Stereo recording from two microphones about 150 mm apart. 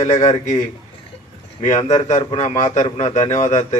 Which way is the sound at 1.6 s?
50° left (ahead or behind).